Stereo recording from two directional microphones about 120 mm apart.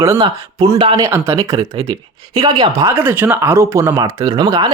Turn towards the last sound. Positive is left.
turn(degrees=-35)  # may be behind; listen again after turning